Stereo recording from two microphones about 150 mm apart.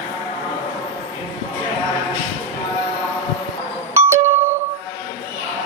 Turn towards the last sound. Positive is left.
turn(degrees=-15)  # may be behind; listen again after turning